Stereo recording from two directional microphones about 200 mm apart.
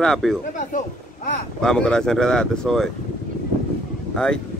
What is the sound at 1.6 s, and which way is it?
Speech, 5° left (ahead or behind).